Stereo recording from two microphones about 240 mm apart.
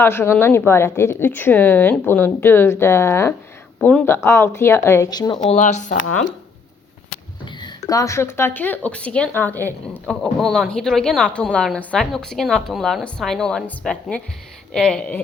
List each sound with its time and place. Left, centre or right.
0.0 s speech: centre
5.5 s speech: left
7.6 s a woman's voice: centre